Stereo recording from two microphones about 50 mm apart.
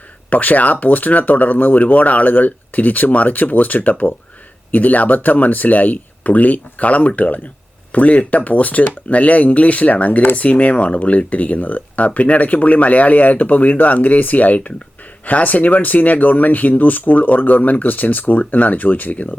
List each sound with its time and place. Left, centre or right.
0.3 s speech: left